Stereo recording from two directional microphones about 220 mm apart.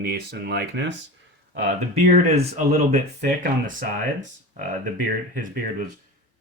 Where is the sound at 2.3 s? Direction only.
30° right (ahead or behind).